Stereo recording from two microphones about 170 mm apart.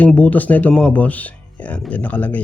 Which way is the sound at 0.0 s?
10° left (ahead or behind).